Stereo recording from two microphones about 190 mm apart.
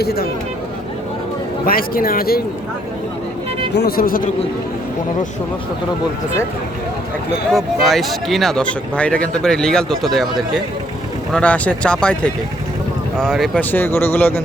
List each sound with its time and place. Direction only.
0.0 s speech: 55° left (ahead or behind)
1.6 s speech: 50° left (ahead or behind)
3.8 s speech: 50° left (ahead or behind)
7.5 s speech: centre (ahead or behind)
11.3 s speech: 5° left (ahead or behind)